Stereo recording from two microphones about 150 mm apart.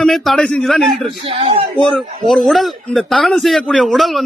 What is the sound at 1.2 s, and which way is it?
Speech, 40° right (ahead or behind).